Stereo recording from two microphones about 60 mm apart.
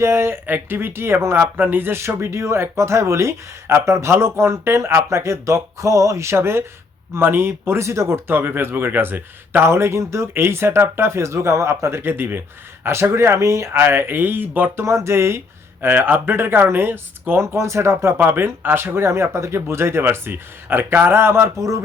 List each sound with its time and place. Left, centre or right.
0.0 s speech: right
0.4 s speech: right
1.4 s speech: right
9.6 s speech: right
12.8 s speech: right
13.7 s speech: right
14.8 s speech: right
15.8 s speech: right
17.4 s speech: right
18.2 s speech: right